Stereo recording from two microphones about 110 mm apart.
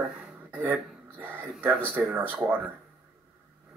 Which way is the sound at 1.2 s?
15° right (ahead or behind).